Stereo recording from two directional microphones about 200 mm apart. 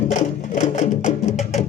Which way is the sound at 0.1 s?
35° left (ahead or behind).